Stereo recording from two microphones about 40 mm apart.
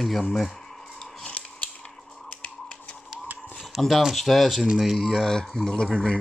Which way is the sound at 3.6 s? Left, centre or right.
Centre.